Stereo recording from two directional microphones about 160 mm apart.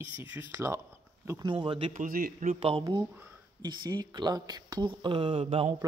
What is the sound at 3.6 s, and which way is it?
Speech, 25° right (ahead or behind).